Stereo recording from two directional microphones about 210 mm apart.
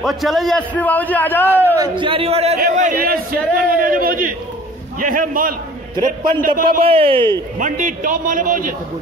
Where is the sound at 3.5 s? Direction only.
40° right (ahead or behind).